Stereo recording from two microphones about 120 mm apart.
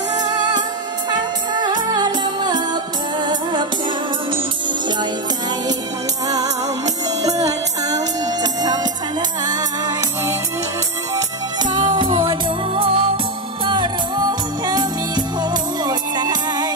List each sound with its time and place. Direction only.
1.6 s music: 35° right (ahead or behind)
6.2 s music: 30° right (ahead or behind)
11.7 s music: 35° right (ahead or behind)